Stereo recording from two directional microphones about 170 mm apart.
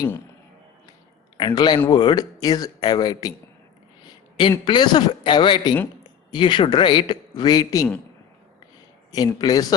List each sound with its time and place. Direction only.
1.4 s speech: 25° left (ahead or behind)
4.4 s speech: 25° left (ahead or behind)
9.1 s speech: 25° left (ahead or behind)